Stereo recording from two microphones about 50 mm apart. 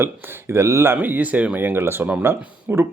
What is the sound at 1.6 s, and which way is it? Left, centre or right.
Speech, right.